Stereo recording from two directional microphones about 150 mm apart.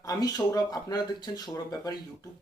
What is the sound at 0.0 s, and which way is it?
Speech, 25° left (ahead or behind).